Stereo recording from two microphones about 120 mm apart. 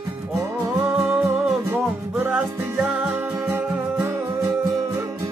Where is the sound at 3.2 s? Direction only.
20° right (ahead or behind).